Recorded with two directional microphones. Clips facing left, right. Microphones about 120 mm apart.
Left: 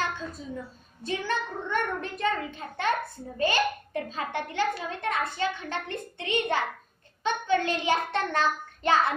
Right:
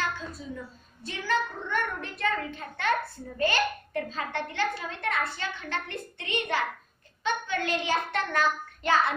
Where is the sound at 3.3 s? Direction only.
20° left (ahead or behind).